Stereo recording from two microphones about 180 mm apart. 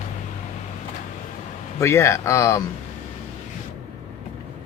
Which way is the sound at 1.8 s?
15° left (ahead or behind).